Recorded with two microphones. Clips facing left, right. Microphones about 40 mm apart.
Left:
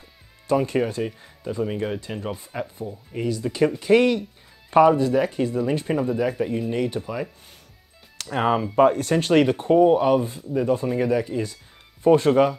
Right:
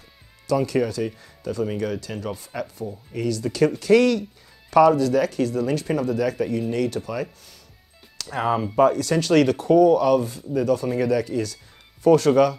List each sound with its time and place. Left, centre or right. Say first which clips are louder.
0.5 s speech: even; left
8.2 s speech: left 1 dB; left